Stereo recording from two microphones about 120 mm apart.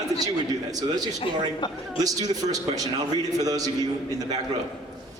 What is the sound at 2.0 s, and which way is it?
A man's voice, 30° right (ahead or behind).